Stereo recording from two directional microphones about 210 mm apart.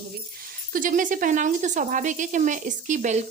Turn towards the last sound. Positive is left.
turn(degrees=-35)  # may be behind; listen again after turning